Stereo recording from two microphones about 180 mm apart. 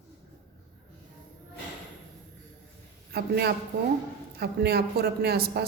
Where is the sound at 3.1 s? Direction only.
65° right (ahead or behind).